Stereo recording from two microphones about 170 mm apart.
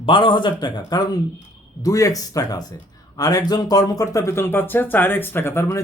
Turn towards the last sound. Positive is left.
turn(degrees=15)  # may be behind; listen again after turning